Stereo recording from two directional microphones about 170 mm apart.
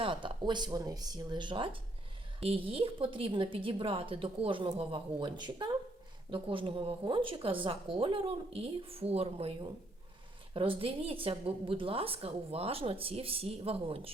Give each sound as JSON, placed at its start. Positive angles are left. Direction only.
{"t": 0.0, "sound": "a woman's voice", "side_deg": -30}